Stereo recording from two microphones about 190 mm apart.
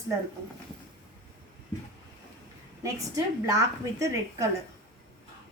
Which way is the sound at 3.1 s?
15° right (ahead or behind).